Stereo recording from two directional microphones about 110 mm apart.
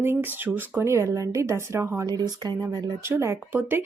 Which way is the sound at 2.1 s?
35° right (ahead or behind).